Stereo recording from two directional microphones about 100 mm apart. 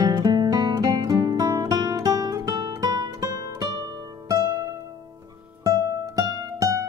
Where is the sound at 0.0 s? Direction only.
45° right (ahead or behind).